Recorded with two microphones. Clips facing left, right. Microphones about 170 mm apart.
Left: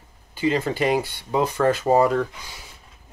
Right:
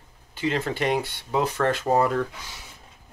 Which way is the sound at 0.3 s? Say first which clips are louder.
Left 4 dB; centre (ahead or behind).